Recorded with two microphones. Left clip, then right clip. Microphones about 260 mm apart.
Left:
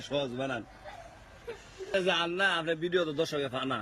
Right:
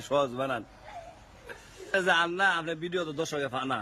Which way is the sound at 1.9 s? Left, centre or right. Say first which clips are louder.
Right 3 dB; centre.